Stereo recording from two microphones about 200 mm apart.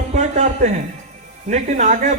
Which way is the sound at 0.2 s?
35° right (ahead or behind).